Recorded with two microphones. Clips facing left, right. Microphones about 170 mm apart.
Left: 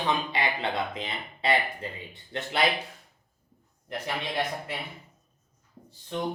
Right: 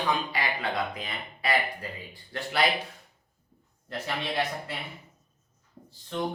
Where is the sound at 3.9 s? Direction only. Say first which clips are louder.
Even; 15° left (ahead or behind).